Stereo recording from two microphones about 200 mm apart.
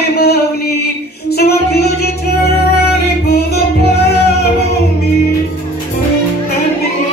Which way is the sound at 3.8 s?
55° left (ahead or behind).